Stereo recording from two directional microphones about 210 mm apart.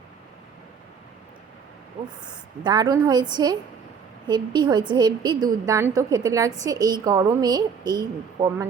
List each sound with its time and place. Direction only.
2.3 s a woman's voice: 20° right (ahead or behind)